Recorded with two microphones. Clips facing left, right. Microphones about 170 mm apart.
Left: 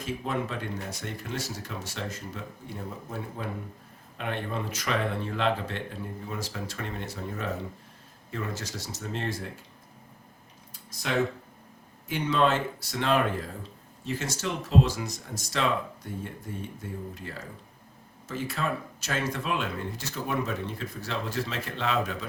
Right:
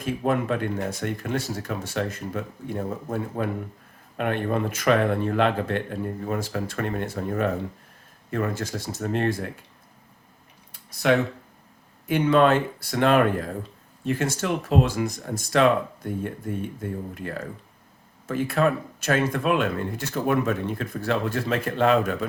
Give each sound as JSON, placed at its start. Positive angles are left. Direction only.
{"t": 0.0, "sound": "speech", "side_deg": -55}
{"t": 11.0, "sound": "speech", "side_deg": -65}